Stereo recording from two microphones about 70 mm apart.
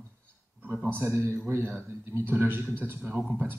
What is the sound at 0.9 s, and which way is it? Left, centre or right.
A man's voice, right.